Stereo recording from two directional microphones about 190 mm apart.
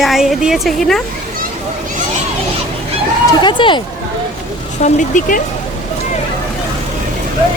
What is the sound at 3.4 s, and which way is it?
Speech, 25° left (ahead or behind).